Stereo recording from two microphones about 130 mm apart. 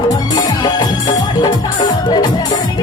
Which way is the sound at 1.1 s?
30° left (ahead or behind).